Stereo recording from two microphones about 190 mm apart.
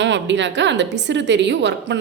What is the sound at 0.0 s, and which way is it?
A woman's voice, 70° right (ahead or behind).